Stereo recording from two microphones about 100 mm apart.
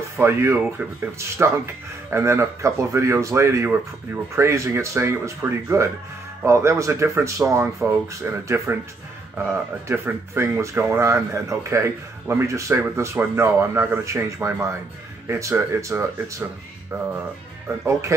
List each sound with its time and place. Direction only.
0.2 s speech: 25° right (ahead or behind)
2.0 s speech: 25° right (ahead or behind)